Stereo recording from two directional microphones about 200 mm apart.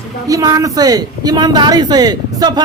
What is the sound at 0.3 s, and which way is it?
Speech, 15° right (ahead or behind).